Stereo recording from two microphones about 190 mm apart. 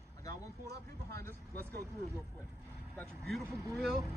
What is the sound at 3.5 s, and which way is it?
Speech, 15° right (ahead or behind).